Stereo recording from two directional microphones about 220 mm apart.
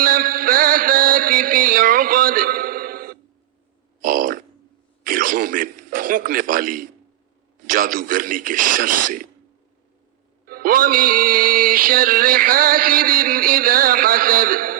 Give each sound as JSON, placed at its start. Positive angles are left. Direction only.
{"t": 0.0, "sound": "mantra", "side_deg": -40}
{"t": 4.0, "sound": "a sound", "side_deg": -40}
{"t": 5.8, "sound": "a man's voice", "side_deg": -40}
{"t": 10.4, "sound": "music", "side_deg": -40}